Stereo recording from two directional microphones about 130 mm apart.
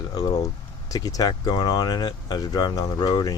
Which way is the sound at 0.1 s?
30° left (ahead or behind).